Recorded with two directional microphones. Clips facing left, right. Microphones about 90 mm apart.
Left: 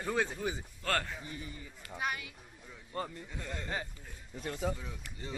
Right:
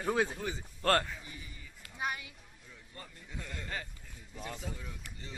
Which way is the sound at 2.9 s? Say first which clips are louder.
Left 13 dB; 70° left (ahead or behind).